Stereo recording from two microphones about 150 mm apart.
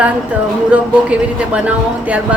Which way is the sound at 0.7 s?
10° right (ahead or behind).